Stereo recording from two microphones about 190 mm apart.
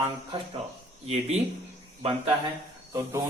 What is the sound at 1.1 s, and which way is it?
Speech, 35° right (ahead or behind).